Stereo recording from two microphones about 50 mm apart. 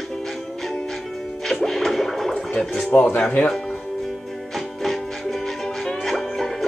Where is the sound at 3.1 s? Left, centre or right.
Left.